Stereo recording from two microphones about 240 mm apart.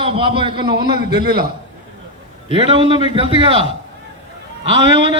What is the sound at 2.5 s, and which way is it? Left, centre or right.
A man's voice, right.